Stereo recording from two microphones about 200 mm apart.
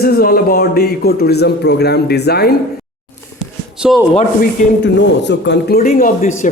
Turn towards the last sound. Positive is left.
turn(degrees=40)  # may be behind; listen again after turning